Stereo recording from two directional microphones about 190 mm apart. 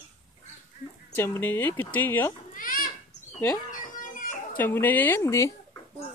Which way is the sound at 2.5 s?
45° left (ahead or behind).